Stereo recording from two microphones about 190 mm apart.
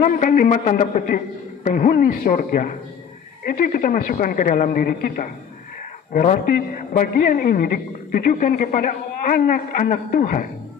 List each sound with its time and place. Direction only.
0.0 s a man's voice: 45° left (ahead or behind)